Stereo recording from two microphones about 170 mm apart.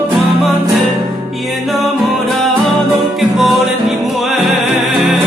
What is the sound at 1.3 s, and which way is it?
Music, centre (ahead or behind).